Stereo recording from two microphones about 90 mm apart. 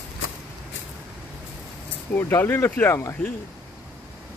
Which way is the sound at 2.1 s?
25° left (ahead or behind).